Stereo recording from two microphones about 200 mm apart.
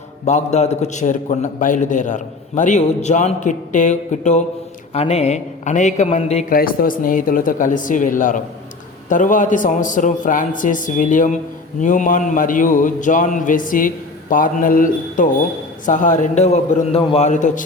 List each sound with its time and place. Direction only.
0.3 s a man's voice: 35° left (ahead or behind)
6.5 s a man's voice: 45° left (ahead or behind)